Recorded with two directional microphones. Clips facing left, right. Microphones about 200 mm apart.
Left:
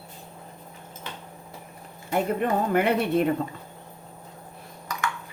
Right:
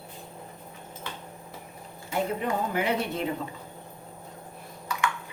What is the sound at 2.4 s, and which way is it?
Speech, 55° left (ahead or behind).